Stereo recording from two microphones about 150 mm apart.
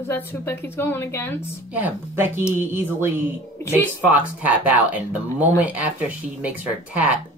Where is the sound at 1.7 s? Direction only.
15° right (ahead or behind).